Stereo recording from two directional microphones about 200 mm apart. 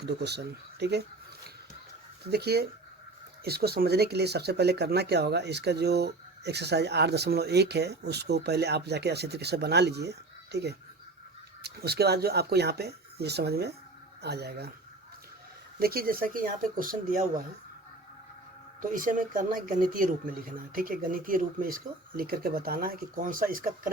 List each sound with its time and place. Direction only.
0.0 s speech: 55° right (ahead or behind)
2.2 s speech: 55° right (ahead or behind)
15.8 s speech: 50° right (ahead or behind)
18.8 s speech: 45° right (ahead or behind)